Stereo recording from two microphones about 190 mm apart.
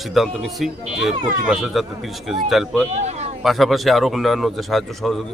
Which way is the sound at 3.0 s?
35° right (ahead or behind).